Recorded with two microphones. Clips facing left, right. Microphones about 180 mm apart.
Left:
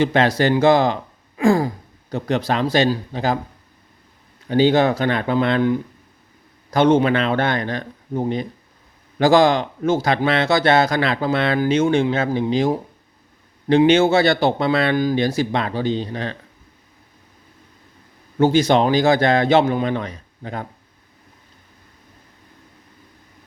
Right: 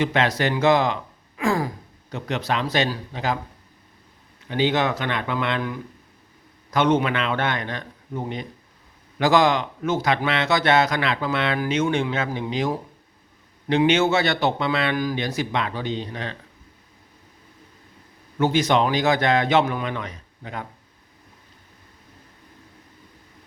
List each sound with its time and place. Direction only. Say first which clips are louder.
0.0 s speech: left 5 dB; 35° left (ahead or behind)
4.4 s speech: left 6 dB; 35° left (ahead or behind)
18.3 s speech: left 4 dB; 30° left (ahead or behind)